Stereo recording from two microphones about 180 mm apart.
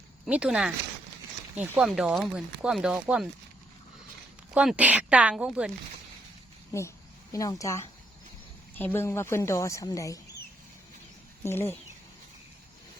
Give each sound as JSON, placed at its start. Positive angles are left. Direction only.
{"t": 0.3, "sound": "speech", "side_deg": -5}
{"t": 4.5, "sound": "speech", "side_deg": -5}
{"t": 7.3, "sound": "a woman's voice", "side_deg": 15}
{"t": 11.4, "sound": "a woman's voice", "side_deg": 15}